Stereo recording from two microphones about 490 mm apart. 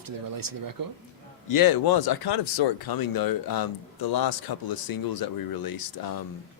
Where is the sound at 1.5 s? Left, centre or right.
Left.